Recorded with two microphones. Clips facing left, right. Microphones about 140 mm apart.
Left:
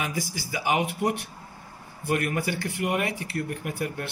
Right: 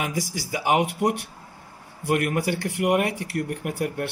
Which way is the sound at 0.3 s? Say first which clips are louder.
Right 5 dB; 65° right (ahead or behind).